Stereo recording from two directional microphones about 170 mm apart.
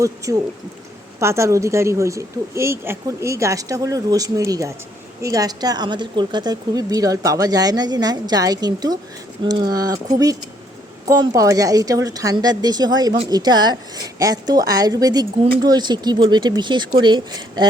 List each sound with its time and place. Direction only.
0.0 s a woman's voice: 20° right (ahead or behind)
11.1 s a woman's voice: 20° right (ahead or behind)